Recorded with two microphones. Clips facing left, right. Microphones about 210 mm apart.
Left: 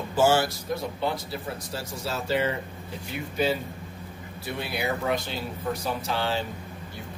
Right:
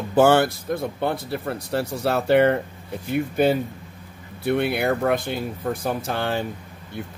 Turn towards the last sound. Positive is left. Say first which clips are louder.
# right 3 dB
turn(degrees=-55)  # may be behind; listen again after turning